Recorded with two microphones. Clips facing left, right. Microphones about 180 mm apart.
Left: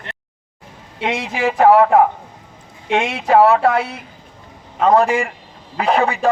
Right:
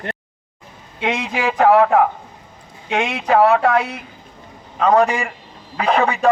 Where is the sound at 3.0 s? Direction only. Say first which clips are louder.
Left 2 dB; 30° left (ahead or behind).